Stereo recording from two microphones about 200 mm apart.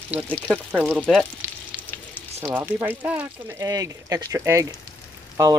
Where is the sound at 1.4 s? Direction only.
10° right (ahead or behind).